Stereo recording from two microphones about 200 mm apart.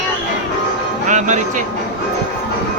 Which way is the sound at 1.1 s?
40° right (ahead or behind).